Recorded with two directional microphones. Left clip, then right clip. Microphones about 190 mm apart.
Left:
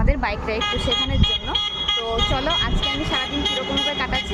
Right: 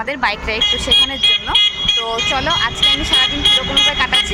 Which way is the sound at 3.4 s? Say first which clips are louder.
Right 9 dB; 15° right (ahead or behind).